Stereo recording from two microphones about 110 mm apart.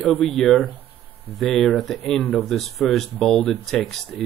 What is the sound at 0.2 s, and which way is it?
Speech, 5° left (ahead or behind).